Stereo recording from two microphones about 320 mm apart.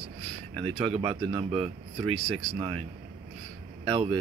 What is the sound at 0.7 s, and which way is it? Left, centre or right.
Speech, centre.